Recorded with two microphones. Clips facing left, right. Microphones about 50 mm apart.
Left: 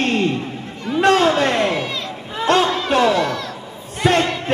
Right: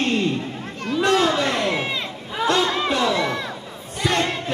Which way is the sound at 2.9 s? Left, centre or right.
Left.